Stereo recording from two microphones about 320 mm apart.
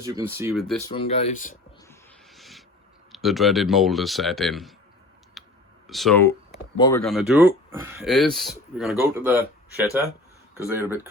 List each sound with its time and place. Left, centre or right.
0.0 s speech: centre
0.9 s speech: centre
1.9 s a sound: centre
3.1 s speech: centre
5.4 s clicking: centre
5.9 s speech: centre
7.0 s speech: centre